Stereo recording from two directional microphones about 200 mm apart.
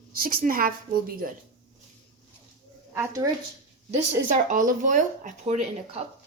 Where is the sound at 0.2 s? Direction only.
45° right (ahead or behind).